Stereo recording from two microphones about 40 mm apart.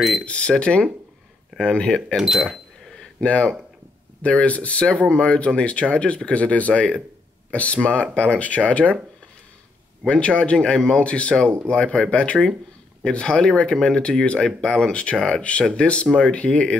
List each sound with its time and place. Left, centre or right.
0.2 s speech: left
2.1 s speech: centre
3.2 s speech: left
10.0 s speech: left
10.6 s speech: centre
12.1 s speech: left
15.1 s speech: centre
15.7 s speech: left